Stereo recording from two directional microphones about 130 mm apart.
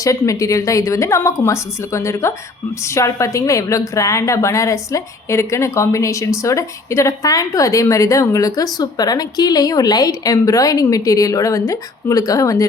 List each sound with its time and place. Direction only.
0.0 s a woman's voice: 25° left (ahead or behind)